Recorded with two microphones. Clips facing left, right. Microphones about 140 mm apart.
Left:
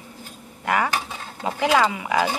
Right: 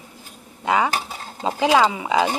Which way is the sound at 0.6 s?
20° right (ahead or behind).